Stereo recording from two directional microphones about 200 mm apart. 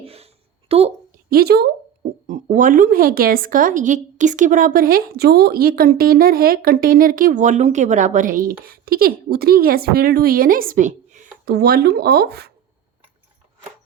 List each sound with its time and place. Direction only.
0.0 s a sound: 30° right (ahead or behind)
0.7 s a woman's voice: 30° right (ahead or behind)
1.3 s a woman's voice: 50° right (ahead or behind)
2.2 s a woman's voice: 40° right (ahead or behind)
11.5 s a woman's voice: 50° right (ahead or behind)